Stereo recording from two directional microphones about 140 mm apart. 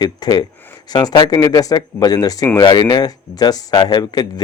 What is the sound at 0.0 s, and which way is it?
Speech, 30° left (ahead or behind).